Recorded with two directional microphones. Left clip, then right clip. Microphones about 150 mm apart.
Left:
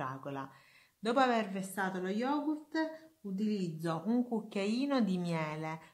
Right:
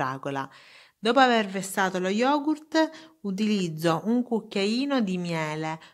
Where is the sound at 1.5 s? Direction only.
75° right (ahead or behind).